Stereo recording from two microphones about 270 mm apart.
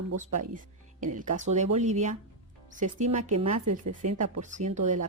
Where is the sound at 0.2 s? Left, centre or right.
Right.